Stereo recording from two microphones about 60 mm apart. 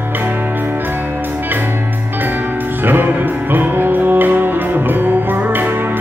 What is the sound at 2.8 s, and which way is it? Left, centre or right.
Music, right.